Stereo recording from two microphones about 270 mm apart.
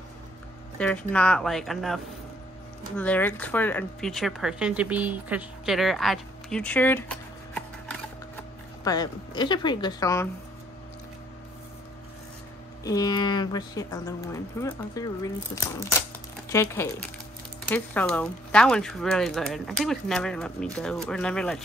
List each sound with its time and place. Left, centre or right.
0.7 s speech: centre
3.0 s speech: centre
12.8 s speech: centre